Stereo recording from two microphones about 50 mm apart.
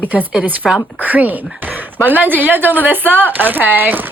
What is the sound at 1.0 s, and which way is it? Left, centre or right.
Speech, right.